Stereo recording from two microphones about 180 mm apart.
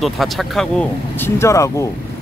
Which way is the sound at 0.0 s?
Centre (ahead or behind).